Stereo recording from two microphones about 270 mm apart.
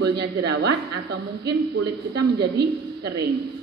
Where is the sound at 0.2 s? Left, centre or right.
Right.